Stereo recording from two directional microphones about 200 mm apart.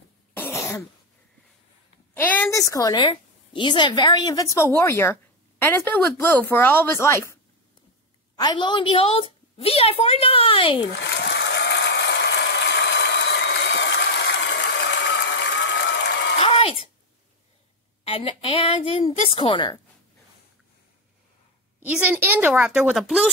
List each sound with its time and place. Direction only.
0.4 s cough: 15° left (ahead or behind)
2.1 s a woman's voice: 10° left (ahead or behind)
8.4 s a woman's voice: 20° left (ahead or behind)
11.0 s a sound: 60° left (ahead or behind)
16.3 s a sound: 30° left (ahead or behind)
18.0 s a woman's voice: 30° left (ahead or behind)
21.7 s a woman's voice: 5° right (ahead or behind)